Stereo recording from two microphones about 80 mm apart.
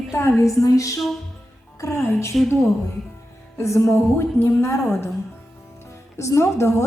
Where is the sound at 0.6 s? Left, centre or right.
Left.